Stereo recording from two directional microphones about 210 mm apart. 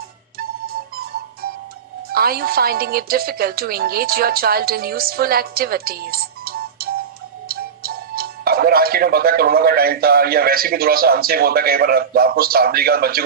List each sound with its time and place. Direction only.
2.1 s a woman's voice: 45° right (ahead or behind)